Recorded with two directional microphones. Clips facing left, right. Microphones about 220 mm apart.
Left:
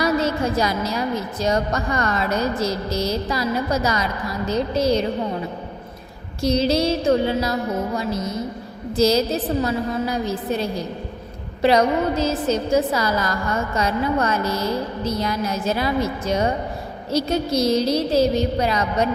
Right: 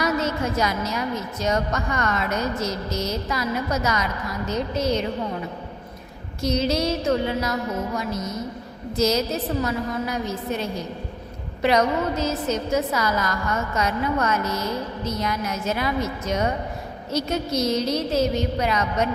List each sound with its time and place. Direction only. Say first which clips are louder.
0.0 s a woman's voice: left 3 dB; 35° left (ahead or behind)
6.4 s a woman's voice: left 4 dB; 30° left (ahead or behind)